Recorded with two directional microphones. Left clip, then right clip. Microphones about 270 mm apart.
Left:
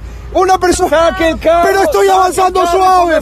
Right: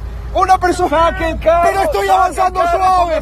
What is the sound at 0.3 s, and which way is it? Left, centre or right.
Speech, left.